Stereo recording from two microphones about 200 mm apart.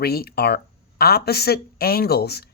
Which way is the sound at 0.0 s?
50° left (ahead or behind).